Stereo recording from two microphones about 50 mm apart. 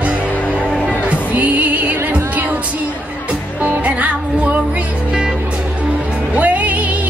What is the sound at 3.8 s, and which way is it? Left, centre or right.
Music, right.